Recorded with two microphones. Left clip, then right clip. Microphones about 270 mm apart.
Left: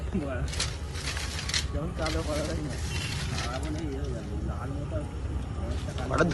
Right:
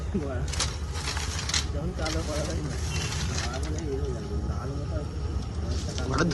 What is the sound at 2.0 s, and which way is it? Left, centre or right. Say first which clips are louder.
Speech: even; left.